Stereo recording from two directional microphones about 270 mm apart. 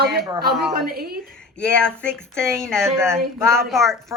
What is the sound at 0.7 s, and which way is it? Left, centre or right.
Speech, right.